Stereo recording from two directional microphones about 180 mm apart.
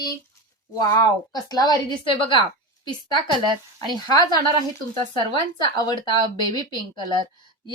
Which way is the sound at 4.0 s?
25° left (ahead or behind).